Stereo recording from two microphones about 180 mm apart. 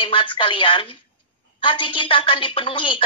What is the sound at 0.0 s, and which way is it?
A woman's voice, 30° left (ahead or behind).